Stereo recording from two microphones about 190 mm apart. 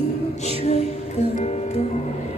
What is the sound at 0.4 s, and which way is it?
Music, 35° left (ahead or behind).